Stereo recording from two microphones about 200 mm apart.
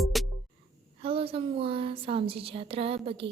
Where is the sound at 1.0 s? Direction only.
30° right (ahead or behind).